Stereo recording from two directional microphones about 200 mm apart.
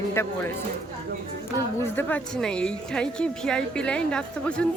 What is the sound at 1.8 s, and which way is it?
A woman's voice, 10° left (ahead or behind).